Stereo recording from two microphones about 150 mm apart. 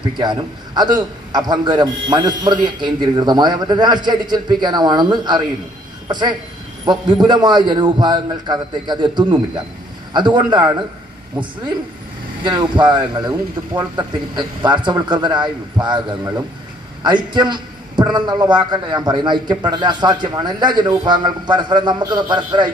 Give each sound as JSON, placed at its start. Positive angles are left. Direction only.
{"t": 0.2, "sound": "a man's voice", "side_deg": -30}
{"t": 12.4, "sound": "a man's voice", "side_deg": -30}